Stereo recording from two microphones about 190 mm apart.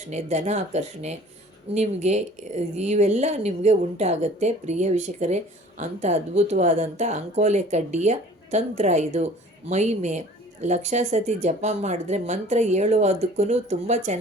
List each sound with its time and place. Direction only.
0.1 s speech: 35° right (ahead or behind)